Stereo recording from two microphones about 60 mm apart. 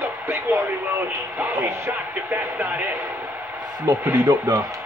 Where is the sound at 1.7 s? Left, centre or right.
Right.